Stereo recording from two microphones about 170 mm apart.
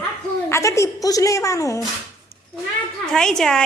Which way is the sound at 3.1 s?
5° left (ahead or behind).